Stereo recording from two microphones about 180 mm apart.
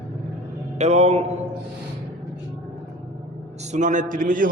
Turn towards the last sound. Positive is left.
turn(degrees=-50)  # may be behind; listen again after turning